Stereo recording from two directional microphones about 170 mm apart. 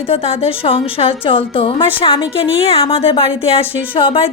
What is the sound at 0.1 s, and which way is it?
A woman's voice, 35° left (ahead or behind).